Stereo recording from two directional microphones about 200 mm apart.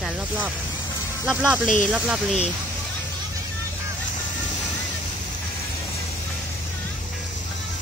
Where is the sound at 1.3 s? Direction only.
5° right (ahead or behind).